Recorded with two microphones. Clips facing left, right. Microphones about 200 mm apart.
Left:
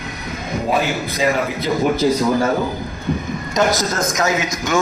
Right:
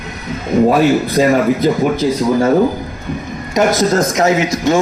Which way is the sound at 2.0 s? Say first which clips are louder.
Left 2 dB; centre (ahead or behind).